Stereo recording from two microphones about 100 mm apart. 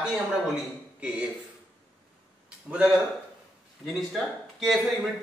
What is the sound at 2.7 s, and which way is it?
A man's voice, 10° right (ahead or behind).